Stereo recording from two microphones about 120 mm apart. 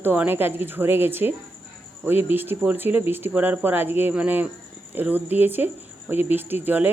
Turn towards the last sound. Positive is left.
turn(degrees=-15)  # may be behind; listen again after turning